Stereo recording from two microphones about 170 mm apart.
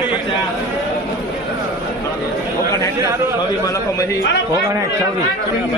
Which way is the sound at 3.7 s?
20° left (ahead or behind).